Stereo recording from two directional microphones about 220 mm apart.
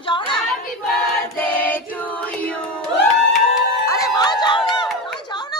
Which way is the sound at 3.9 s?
15° left (ahead or behind).